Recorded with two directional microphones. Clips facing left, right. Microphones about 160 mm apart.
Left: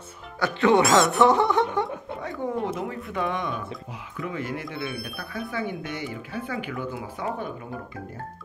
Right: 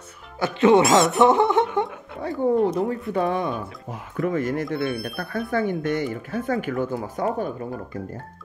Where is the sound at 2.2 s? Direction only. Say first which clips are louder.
Right 9 dB; 35° right (ahead or behind).